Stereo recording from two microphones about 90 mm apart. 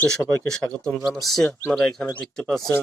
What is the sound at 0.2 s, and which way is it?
Speech, 35° right (ahead or behind).